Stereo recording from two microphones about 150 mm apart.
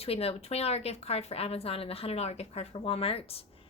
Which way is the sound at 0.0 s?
40° left (ahead or behind).